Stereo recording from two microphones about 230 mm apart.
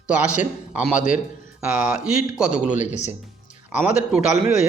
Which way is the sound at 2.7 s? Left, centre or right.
Left.